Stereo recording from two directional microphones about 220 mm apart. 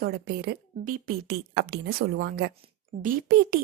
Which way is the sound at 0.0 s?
45° right (ahead or behind).